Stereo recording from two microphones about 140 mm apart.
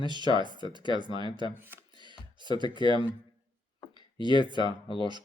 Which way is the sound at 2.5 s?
35° left (ahead or behind).